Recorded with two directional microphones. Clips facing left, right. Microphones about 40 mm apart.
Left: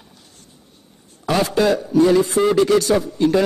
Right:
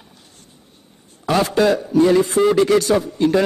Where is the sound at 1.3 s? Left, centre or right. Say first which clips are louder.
Right 1 dB; right.